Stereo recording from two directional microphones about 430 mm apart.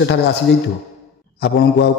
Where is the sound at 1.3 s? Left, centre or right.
Left.